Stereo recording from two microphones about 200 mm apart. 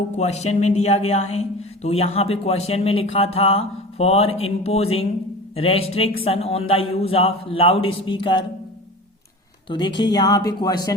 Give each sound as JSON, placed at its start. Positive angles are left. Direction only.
{"t": 0.2, "sound": "a man's voice", "side_deg": 35}
{"t": 9.6, "sound": "a man's voice", "side_deg": 25}